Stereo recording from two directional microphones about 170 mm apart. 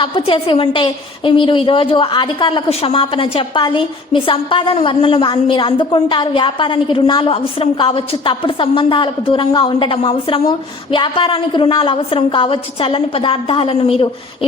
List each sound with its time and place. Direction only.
0.0 s a woman's voice: 30° left (ahead or behind)